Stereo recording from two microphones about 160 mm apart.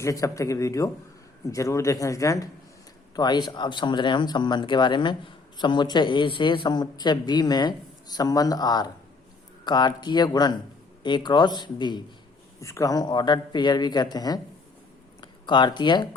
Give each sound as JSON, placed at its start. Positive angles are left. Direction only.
{"t": 0.0, "sound": "speech", "side_deg": 20}